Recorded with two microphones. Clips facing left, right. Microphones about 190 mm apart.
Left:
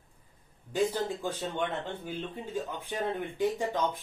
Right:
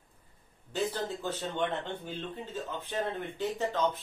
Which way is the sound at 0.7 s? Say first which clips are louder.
Left 4 dB; 10° left (ahead or behind).